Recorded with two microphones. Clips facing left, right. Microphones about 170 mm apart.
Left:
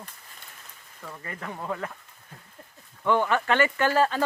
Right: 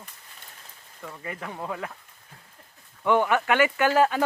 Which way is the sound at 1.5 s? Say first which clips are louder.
Left 3 dB; 10° right (ahead or behind).